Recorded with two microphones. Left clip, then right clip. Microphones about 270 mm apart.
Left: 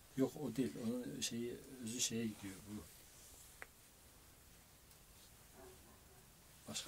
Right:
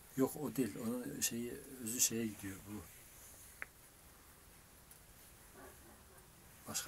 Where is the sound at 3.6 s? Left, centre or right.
Centre.